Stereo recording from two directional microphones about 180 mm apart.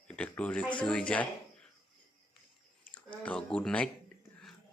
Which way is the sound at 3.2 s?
5° left (ahead or behind).